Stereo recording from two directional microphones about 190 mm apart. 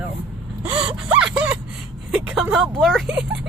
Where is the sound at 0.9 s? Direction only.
5° right (ahead or behind).